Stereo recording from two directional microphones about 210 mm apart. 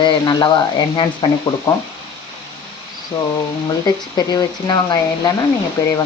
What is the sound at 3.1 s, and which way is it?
Speech, 15° left (ahead or behind).